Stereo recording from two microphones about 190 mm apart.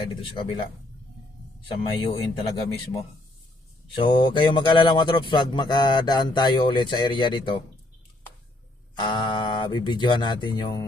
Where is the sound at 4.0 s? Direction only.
25° left (ahead or behind).